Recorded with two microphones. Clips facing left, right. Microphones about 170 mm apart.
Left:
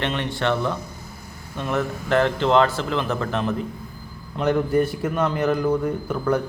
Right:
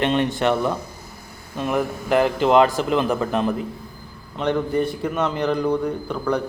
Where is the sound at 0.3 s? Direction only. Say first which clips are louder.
Right 3 dB; 15° right (ahead or behind).